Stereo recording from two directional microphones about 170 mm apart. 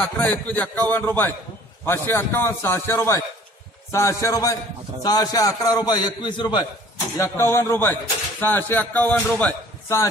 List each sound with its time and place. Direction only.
0.0 s a man's voice: 10° left (ahead or behind); by 6.6 s 25° left (ahead or behind)
7.2 s speech: 15° left (ahead or behind)